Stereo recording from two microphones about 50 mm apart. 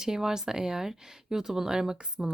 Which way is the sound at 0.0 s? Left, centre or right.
Centre.